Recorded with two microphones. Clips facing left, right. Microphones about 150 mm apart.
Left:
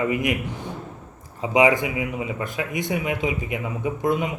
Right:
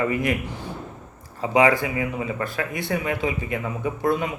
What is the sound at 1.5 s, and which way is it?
Speech, 15° left (ahead or behind).